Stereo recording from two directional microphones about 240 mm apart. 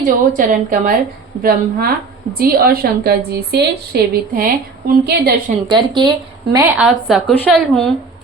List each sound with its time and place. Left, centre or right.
0.0 s a woman's voice: right
5.6 s a woman's voice: centre